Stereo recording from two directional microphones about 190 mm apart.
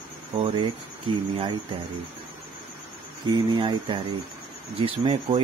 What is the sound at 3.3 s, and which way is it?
Speech, 25° right (ahead or behind).